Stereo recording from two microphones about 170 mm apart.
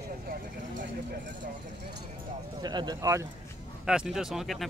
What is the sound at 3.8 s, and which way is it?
Speech, 5° right (ahead or behind).